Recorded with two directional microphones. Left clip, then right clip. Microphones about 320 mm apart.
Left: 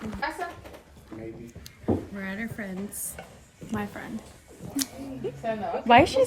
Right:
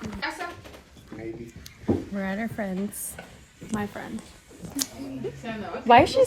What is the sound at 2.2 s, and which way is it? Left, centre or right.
Speech, centre.